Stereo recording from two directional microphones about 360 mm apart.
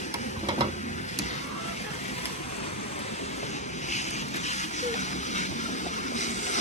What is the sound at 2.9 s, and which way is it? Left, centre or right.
Vehicle, centre.